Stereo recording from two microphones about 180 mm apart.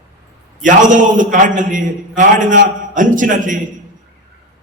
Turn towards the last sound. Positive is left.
turn(degrees=-45)  # may be behind; listen again after turning